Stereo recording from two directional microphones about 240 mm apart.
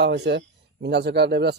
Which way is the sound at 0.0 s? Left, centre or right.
Right.